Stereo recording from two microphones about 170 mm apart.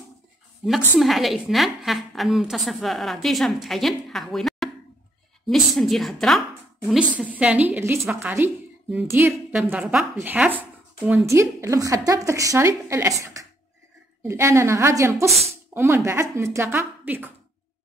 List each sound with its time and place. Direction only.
0.7 s a woman's voice: centre (ahead or behind)